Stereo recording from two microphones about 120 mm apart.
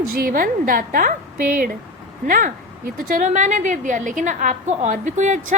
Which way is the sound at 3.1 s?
85° right.